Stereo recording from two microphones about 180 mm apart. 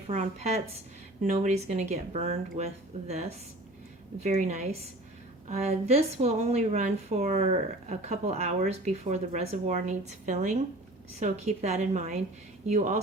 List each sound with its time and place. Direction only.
0.1 s speech: 35° right (ahead or behind)